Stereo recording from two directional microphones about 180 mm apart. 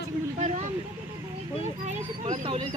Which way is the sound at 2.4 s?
25° right (ahead or behind).